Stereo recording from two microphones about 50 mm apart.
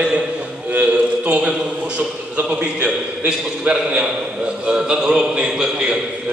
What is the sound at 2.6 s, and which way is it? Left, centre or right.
A man's voice, right.